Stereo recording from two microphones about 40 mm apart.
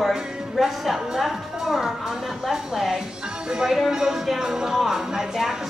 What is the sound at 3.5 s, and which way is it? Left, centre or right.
A woman's voice, centre.